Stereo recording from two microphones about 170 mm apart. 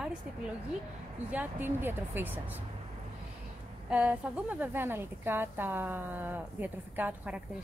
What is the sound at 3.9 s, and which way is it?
A woman's voice, 5° right (ahead or behind).